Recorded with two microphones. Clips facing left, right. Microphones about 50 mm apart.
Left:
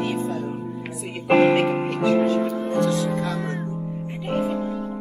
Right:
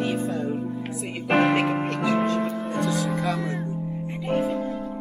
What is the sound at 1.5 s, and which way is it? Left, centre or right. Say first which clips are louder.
Speech: left 2 dB; centre.